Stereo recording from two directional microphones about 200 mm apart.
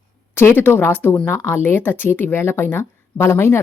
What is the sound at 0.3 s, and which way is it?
A woman's voice, 10° left (ahead or behind).